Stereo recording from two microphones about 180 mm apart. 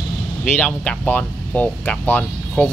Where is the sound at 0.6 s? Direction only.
5° left (ahead or behind).